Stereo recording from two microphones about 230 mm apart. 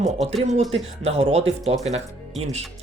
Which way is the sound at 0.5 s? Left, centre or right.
Right.